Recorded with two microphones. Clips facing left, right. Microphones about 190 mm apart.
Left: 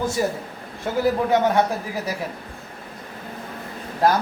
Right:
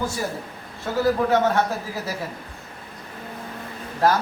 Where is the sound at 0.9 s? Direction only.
15° left (ahead or behind).